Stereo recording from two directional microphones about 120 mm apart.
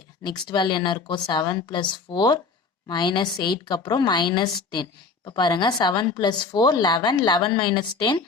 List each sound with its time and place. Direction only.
0.2 s a woman's voice: 40° left (ahead or behind)